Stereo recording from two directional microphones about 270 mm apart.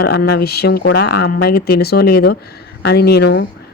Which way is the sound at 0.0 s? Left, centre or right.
Left.